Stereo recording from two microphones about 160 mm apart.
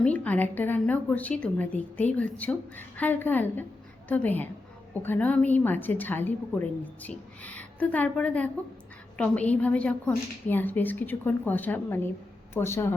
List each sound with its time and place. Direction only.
0.0 s a woman's voice: 10° left (ahead or behind)